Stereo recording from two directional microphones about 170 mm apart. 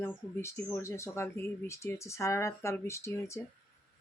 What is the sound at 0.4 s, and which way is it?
Speech, 15° left (ahead or behind).